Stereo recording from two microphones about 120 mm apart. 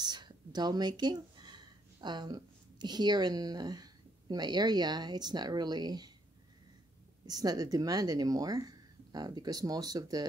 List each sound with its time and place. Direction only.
0.0 s speech: 35° right (ahead or behind)
7.2 s speech: 30° right (ahead or behind)